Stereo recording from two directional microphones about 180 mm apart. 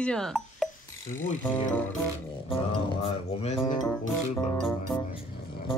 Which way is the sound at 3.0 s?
35° left (ahead or behind).